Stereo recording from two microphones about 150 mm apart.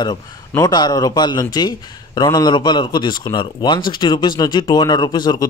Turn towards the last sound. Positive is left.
turn(degrees=30)  # may be behind; listen again after turning